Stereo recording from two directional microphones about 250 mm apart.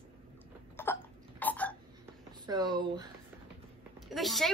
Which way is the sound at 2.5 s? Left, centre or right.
Centre.